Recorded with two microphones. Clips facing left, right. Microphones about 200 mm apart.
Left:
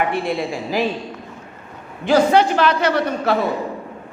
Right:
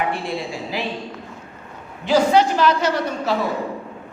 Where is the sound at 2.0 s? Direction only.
60° left (ahead or behind).